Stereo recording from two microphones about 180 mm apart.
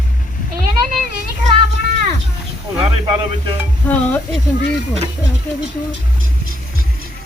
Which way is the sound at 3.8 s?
10° left (ahead or behind).